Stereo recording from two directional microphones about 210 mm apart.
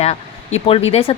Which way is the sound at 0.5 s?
25° left (ahead or behind).